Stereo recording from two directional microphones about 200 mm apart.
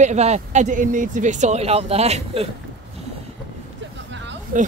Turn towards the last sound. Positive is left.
turn(degrees=-40)  # may be behind; listen again after turning